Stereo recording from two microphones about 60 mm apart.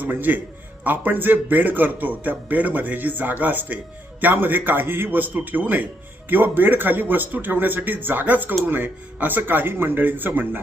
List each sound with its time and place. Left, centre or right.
0.0 s a man's voice: right